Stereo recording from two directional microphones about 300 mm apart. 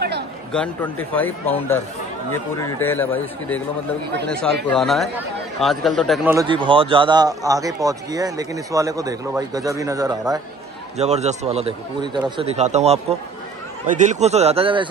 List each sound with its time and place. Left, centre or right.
0.5 s a man's voice: centre
4.6 s speech: centre
6.3 s a man's voice: centre